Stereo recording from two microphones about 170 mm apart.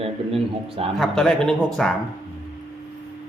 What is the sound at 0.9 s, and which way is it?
A man's voice, centre (ahead or behind).